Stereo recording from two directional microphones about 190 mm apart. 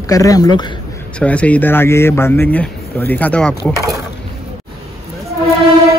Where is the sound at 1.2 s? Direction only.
5° left (ahead or behind).